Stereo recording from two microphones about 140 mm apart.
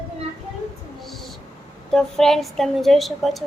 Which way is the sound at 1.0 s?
Centre (ahead or behind).